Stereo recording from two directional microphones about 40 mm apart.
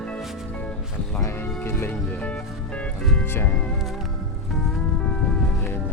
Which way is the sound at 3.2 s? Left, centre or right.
Left.